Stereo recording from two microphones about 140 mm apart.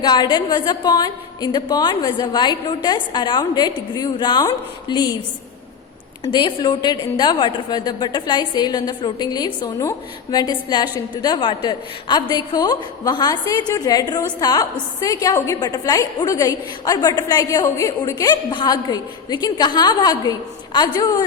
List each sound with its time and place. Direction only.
0.0 s a woman's voice: 30° left (ahead or behind)
6.2 s a woman's voice: 35° left (ahead or behind)